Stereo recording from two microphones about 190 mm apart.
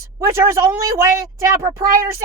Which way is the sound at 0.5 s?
15° right (ahead or behind).